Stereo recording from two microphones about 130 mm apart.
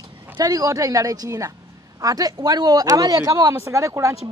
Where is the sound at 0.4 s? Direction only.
30° right (ahead or behind).